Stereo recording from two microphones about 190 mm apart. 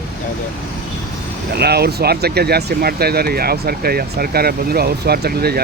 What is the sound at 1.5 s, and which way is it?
Speech, 55° right (ahead or behind).